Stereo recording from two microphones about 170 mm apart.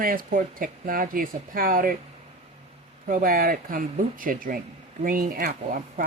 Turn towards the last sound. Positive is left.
turn(degrees=-50)  # may be behind; listen again after turning